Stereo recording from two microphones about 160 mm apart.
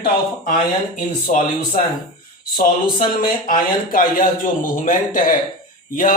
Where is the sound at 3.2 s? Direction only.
60° left (ahead or behind).